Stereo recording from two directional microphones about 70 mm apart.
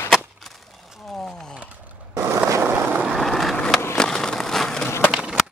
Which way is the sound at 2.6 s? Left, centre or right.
Right.